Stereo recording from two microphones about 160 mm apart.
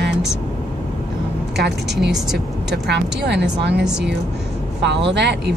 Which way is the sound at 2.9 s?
90° right.